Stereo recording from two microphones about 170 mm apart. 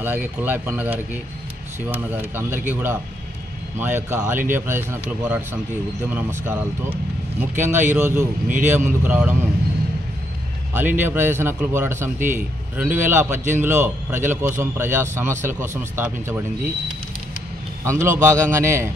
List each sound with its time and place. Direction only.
0.0 s a man's voice: 10° right (ahead or behind)
10.7 s a man's voice: 10° right (ahead or behind)
17.8 s a man's voice: 15° right (ahead or behind)